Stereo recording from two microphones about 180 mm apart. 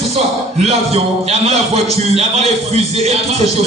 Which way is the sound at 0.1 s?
35° right (ahead or behind).